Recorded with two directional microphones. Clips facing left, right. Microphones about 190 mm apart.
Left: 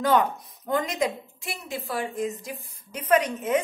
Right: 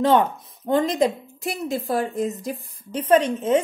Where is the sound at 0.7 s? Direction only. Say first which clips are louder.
Right 6 dB; 30° right (ahead or behind).